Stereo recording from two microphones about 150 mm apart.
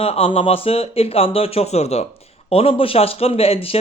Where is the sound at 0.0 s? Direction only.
40° left (ahead or behind).